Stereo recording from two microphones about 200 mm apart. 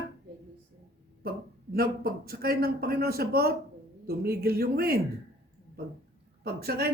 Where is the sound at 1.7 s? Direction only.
50° right (ahead or behind).